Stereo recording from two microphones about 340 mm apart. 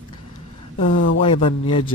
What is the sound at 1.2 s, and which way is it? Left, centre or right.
Speech, centre.